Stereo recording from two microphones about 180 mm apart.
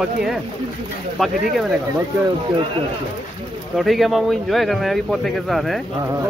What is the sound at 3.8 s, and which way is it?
A man's voice, centre (ahead or behind).